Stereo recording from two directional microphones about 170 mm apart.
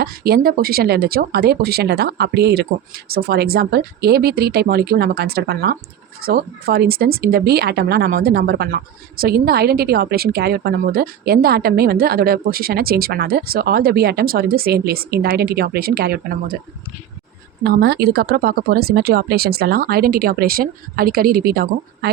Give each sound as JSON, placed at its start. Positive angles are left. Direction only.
{"t": 0.0, "sound": "speech", "side_deg": -65}
{"t": 17.6, "sound": "speech", "side_deg": -65}